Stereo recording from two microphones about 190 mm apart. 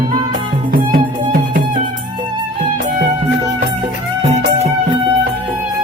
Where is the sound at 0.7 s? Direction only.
50° right (ahead or behind).